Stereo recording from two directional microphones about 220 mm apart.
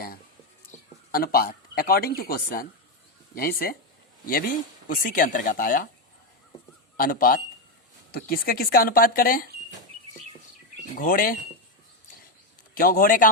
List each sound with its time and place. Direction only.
0.7 s a sound: 35° left (ahead or behind)
1.1 s speech: 40° left (ahead or behind)
4.9 s speech: 40° left (ahead or behind)
6.9 s speech: 40° left (ahead or behind)
10.9 s speech: 40° left (ahead or behind)
12.7 s speech: 40° left (ahead or behind)